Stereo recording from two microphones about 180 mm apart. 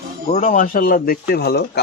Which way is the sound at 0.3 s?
45° left (ahead or behind).